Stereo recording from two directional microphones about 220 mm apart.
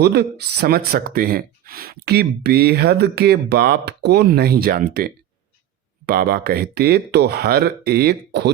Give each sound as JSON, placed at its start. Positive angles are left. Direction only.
{"t": 0.0, "sound": "speech", "side_deg": -50}